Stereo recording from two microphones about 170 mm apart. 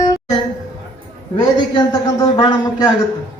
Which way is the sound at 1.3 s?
25° left (ahead or behind).